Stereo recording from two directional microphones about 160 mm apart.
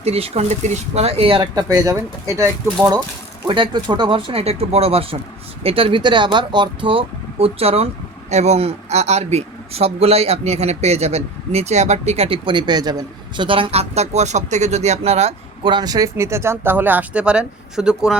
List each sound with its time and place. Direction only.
0.0 s speech: 40° right (ahead or behind); by 2.5 s 20° right (ahead or behind)
3.4 s speech: 30° right (ahead or behind); by 18.2 s 5° right (ahead or behind)